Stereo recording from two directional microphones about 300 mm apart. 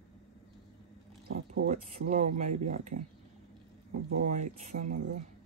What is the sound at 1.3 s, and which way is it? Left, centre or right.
Speech, right.